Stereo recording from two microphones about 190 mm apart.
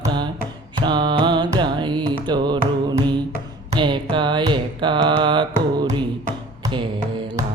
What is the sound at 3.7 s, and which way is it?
Carnatic music, 25° right (ahead or behind).